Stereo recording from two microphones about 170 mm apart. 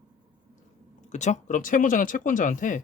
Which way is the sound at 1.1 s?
45° left (ahead or behind).